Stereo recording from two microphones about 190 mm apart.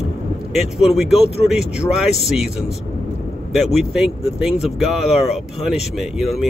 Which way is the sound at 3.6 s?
Centre (ahead or behind).